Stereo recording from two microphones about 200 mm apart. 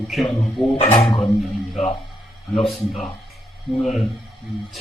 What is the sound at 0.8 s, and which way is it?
Speech, 30° left (ahead or behind).